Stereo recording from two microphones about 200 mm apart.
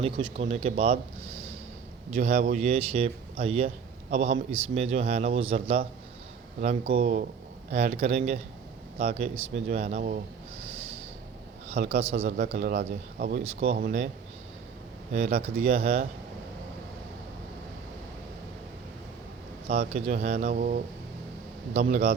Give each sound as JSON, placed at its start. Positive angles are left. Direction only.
{"t": 0.0, "sound": "speech", "side_deg": -30}
{"t": 2.1, "sound": "a man's voice", "side_deg": -30}
{"t": 9.6, "sound": "a man's voice", "side_deg": -35}
{"t": 11.7, "sound": "a man's voice", "side_deg": -35}
{"t": 13.4, "sound": "a man's voice", "side_deg": -30}
{"t": 15.1, "sound": "a man's voice", "side_deg": -35}
{"t": 19.9, "sound": "a man's voice", "side_deg": -35}